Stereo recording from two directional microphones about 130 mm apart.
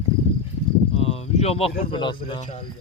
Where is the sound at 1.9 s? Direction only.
40° left (ahead or behind).